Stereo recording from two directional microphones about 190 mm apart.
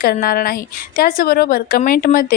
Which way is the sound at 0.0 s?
50° left (ahead or behind).